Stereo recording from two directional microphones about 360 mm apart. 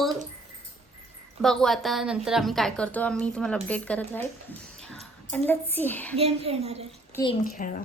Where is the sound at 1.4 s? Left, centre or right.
Centre.